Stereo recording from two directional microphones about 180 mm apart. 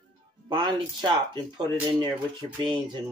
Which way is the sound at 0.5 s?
25° right (ahead or behind).